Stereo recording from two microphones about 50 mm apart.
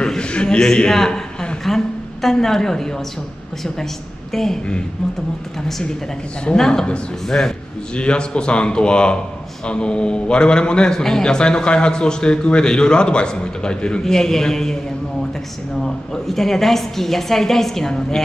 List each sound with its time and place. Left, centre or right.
0.0 s a man's voice: centre
4.3 s speech: centre
5.7 s a man's voice: centre
14.0 s a man's voice: centre
15.8 s a man's voice: centre